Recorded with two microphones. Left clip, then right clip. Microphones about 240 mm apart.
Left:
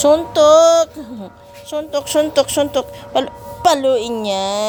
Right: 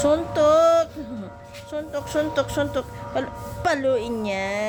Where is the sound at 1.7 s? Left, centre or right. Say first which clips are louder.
Left 8 dB; left.